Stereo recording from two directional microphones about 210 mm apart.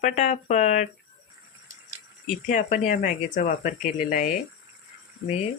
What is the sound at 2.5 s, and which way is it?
Speech, 40° left (ahead or behind).